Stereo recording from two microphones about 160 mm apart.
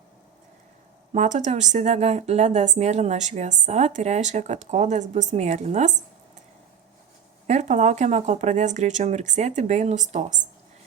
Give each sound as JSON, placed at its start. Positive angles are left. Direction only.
{"t": 1.1, "sound": "a woman's voice", "side_deg": -50}
{"t": 7.4, "sound": "a woman's voice", "side_deg": -45}